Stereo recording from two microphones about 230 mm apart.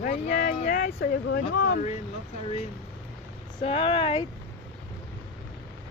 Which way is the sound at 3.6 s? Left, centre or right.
Left.